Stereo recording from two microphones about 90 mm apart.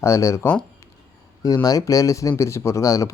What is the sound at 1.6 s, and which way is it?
Speech, 40° left (ahead or behind).